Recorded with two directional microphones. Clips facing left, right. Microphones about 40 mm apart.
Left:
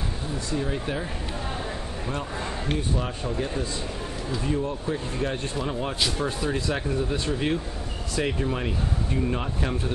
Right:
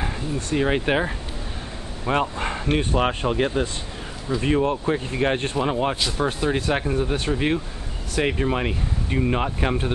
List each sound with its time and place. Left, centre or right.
0.5 s speech: right